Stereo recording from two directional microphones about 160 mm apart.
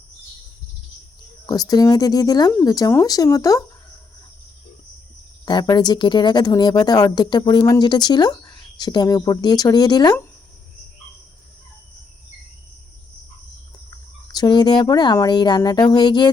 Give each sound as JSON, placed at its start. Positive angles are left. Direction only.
{"t": 1.5, "sound": "speech", "side_deg": 25}
{"t": 5.5, "sound": "speech", "side_deg": 25}
{"t": 14.3, "sound": "speech", "side_deg": 25}